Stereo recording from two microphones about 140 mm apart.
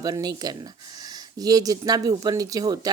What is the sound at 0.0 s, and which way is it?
Speech, 30° right (ahead or behind).